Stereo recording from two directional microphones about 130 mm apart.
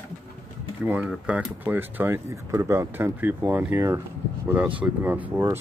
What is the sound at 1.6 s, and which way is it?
Speech, 15° right (ahead or behind).